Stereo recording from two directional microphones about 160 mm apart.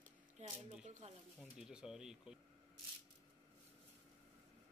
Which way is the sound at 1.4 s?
5° right (ahead or behind).